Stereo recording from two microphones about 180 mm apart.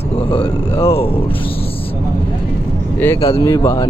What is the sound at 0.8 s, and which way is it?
Speech, 30° left (ahead or behind).